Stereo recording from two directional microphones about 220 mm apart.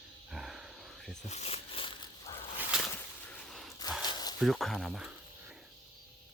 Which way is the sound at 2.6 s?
5° right (ahead or behind).